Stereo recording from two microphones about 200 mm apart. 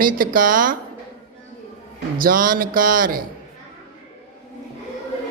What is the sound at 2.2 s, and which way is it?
A man's voice, 45° right (ahead or behind).